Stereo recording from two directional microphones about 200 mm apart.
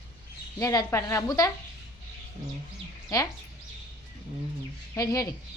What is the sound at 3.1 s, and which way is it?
Speech, 15° left (ahead or behind).